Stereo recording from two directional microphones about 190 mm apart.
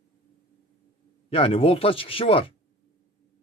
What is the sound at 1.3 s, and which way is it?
Speech, 30° left (ahead or behind).